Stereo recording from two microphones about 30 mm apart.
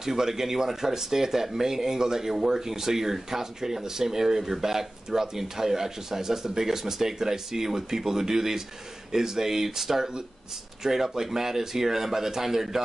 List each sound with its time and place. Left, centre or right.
0.0 s speech: centre